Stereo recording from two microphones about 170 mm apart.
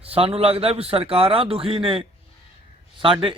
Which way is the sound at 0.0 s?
35° right (ahead or behind).